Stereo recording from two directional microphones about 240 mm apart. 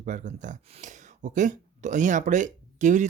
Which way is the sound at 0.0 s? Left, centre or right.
Right.